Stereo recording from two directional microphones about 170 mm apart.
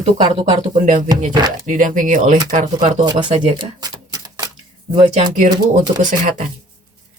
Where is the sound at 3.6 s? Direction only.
25° right (ahead or behind).